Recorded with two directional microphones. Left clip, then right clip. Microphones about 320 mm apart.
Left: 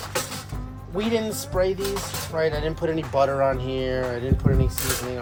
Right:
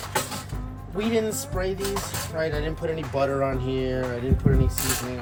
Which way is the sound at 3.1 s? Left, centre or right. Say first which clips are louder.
Left 4 dB; centre.